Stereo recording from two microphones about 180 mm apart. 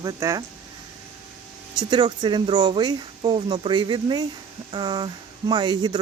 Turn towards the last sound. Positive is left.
turn(degrees=-25)  # may be behind; listen again after turning